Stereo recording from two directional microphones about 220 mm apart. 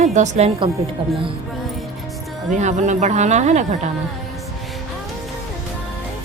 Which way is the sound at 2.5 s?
35° right (ahead or behind).